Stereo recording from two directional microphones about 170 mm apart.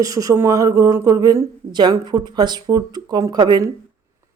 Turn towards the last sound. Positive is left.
turn(degrees=-25)  # may be behind; listen again after turning